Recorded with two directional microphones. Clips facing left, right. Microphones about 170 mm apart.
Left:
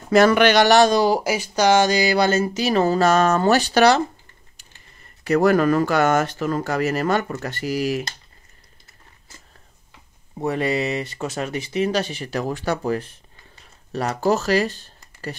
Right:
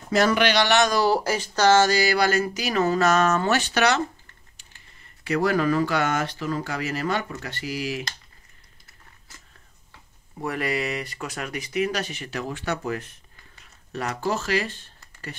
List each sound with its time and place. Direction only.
0.1 s speech: 55° left (ahead or behind); by 0.9 s 35° left (ahead or behind)
0.9 s speech: 15° left (ahead or behind); by 4.0 s 35° left (ahead or behind)
5.2 s speech: 45° left (ahead or behind)
10.4 s speech: 25° left (ahead or behind)